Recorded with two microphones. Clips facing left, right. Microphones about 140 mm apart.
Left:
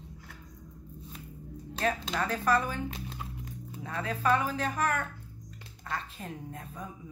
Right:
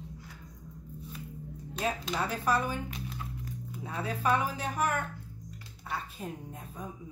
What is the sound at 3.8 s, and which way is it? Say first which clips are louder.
Speech: left 1 dB; 10° right (ahead or behind).